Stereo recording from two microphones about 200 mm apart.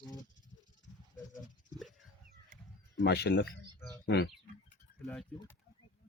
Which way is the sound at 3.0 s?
55° left (ahead or behind).